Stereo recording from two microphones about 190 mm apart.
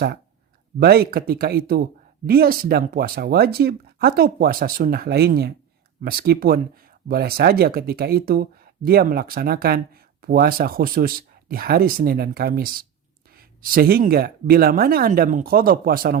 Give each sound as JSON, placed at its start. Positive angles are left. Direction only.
{"t": 0.8, "sound": "speech", "side_deg": -55}